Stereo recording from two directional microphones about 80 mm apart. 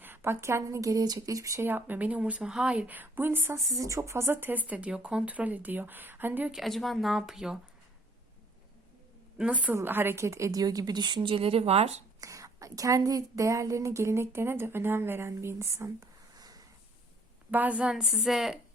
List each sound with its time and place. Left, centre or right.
0.0 s a woman's voice: right
1.6 s speech: right
3.7 s speech: right
6.5 s speech: centre
9.4 s a woman's voice: centre; by 11.3 s right
12.2 s a woman's voice: right
17.5 s a woman's voice: centre